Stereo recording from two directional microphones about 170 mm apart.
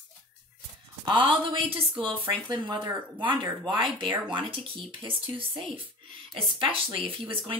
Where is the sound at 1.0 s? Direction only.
25° right (ahead or behind).